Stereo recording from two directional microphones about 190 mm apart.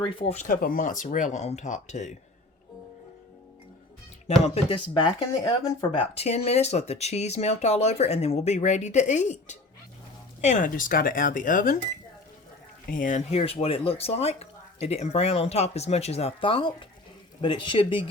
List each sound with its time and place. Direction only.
0.0 s speech: 30° left (ahead or behind)
4.3 s speech: 35° left (ahead or behind)
12.9 s speech: 45° left (ahead or behind); by 18.1 s 25° left (ahead or behind)